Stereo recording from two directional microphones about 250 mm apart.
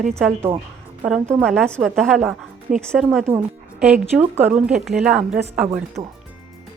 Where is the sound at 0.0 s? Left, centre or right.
Centre.